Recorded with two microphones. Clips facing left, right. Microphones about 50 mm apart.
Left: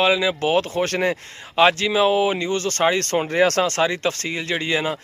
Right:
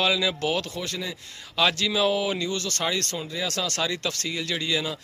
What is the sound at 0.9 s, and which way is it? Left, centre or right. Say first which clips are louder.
Speech: left 11 dB; left.